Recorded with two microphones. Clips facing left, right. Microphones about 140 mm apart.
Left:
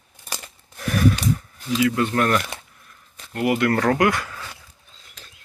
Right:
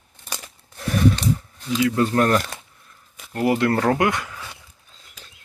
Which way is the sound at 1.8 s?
30° right (ahead or behind).